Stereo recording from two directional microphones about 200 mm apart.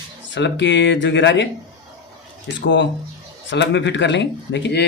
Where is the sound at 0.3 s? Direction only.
65° left (ahead or behind).